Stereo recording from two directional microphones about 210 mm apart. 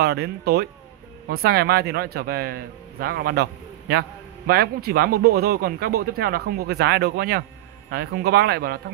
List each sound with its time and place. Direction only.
0.0 s speech: 50° right (ahead or behind)